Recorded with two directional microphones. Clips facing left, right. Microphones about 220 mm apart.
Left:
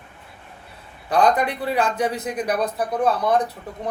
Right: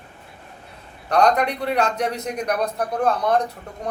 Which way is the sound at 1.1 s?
5° left (ahead or behind).